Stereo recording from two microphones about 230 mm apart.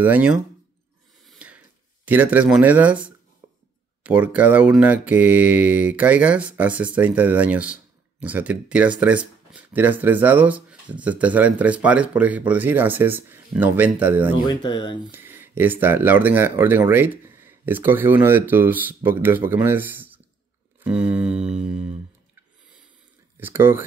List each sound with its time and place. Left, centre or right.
0.0 s speech: centre
1.2 s a sound: centre
2.0 s speech: centre
14.4 s speech: centre
15.0 s speech: centre
20.8 s a sound: centre
23.4 s speech: centre